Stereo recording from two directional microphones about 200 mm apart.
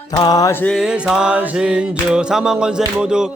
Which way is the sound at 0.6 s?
Centre (ahead or behind).